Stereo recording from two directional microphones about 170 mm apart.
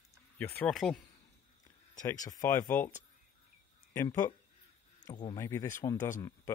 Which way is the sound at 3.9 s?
20° left (ahead or behind).